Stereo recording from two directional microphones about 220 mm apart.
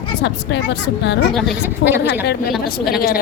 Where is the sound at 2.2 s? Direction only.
45° left (ahead or behind).